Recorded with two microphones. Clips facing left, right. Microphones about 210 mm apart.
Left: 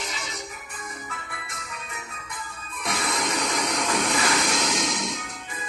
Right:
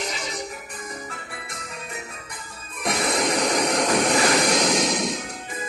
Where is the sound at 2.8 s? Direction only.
40° right (ahead or behind).